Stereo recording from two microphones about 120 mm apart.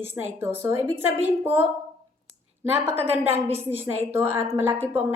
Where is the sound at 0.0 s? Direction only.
20° right (ahead or behind).